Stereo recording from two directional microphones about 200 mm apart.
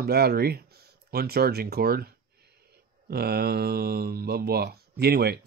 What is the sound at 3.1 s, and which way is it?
Speech, 50° right (ahead or behind).